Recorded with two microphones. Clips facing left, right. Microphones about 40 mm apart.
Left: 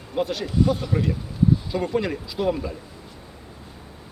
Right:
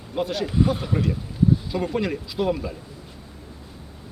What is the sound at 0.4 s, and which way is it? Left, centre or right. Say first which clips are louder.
Speech: even; centre.